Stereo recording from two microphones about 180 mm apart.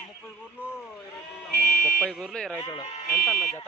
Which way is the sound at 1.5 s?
65° left (ahead or behind).